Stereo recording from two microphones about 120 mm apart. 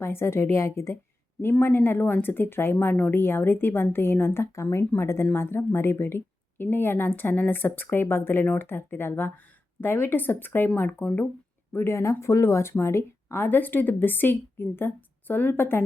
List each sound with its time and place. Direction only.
0.0 s speech: 20° left (ahead or behind)